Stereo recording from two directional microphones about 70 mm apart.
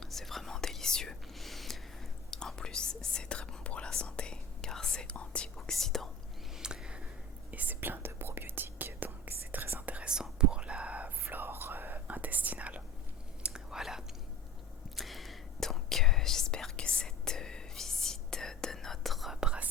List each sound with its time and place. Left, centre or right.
0.0 s whispering: centre
5.7 s whispering: centre
6.6 s a sound: centre
7.5 s whispering: right
13.4 s whispering: centre